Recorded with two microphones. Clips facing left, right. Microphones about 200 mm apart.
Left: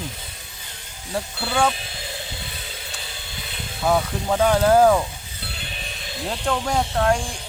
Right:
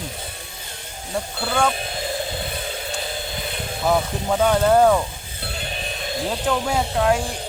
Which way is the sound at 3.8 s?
Centre (ahead or behind).